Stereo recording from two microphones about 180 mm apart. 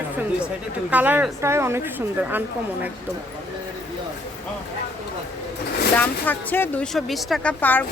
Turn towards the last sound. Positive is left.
turn(degrees=10)  # may be behind; listen again after turning